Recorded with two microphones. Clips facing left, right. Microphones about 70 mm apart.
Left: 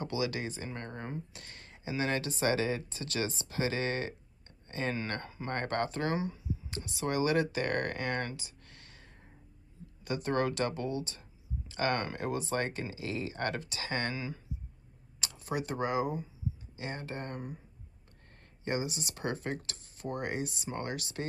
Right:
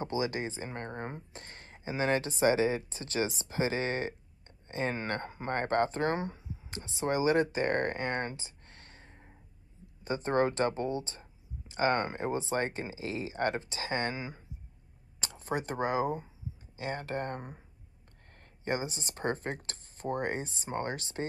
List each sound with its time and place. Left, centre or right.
0.0 s speech: right
18.6 s speech: right